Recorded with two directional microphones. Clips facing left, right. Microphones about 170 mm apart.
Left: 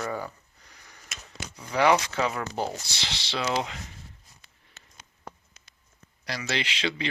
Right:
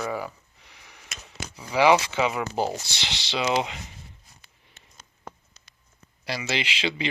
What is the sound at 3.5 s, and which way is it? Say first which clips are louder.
Speech: right 3 dB; 5° right (ahead or behind).